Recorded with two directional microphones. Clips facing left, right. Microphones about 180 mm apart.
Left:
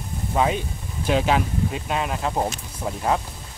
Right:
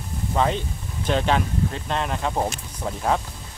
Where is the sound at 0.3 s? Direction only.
5° left (ahead or behind).